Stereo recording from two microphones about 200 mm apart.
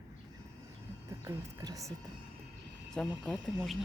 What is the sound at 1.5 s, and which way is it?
Speech, 15° right (ahead or behind).